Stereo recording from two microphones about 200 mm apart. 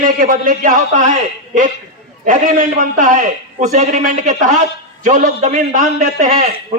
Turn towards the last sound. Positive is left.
turn(degrees=-40)  # may be behind; listen again after turning